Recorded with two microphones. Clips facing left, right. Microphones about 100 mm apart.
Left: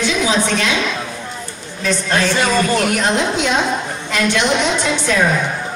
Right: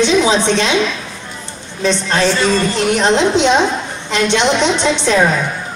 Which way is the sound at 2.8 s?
25° right (ahead or behind).